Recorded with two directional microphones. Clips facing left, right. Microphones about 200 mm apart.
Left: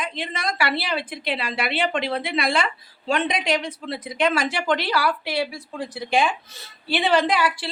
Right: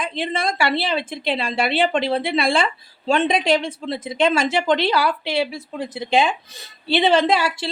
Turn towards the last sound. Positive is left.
turn(degrees=-25)  # may be behind; listen again after turning